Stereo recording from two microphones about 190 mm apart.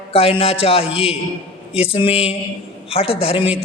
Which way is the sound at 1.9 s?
30° left (ahead or behind).